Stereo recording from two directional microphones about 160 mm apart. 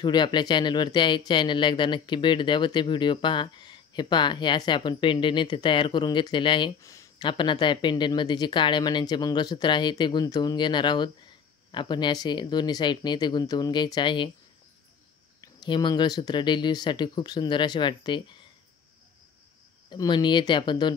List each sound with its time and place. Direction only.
0.0 s speech: 30° left (ahead or behind)
15.4 s speech: 25° left (ahead or behind)
19.9 s speech: 30° left (ahead or behind)